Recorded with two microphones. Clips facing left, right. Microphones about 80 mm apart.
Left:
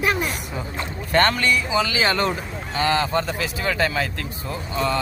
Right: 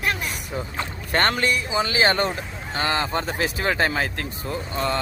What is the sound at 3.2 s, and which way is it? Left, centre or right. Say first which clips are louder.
Speech: right 1 dB; right.